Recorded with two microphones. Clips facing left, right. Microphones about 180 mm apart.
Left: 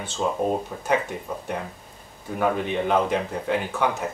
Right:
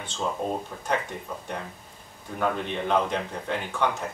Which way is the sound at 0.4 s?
5° left (ahead or behind).